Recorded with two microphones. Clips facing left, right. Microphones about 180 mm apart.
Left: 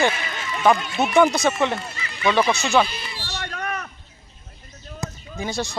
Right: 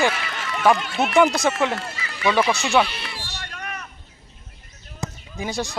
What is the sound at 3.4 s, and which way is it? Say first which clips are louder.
Vehicle: left 9 dB; 50° left (ahead or behind).